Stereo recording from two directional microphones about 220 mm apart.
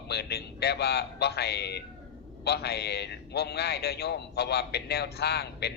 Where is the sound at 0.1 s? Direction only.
45° left (ahead or behind).